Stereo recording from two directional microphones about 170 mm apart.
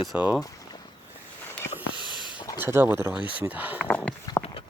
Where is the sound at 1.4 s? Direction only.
15° left (ahead or behind).